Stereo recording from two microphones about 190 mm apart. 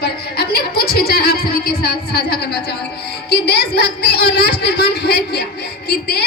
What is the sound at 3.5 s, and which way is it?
Speech, 60° left (ahead or behind).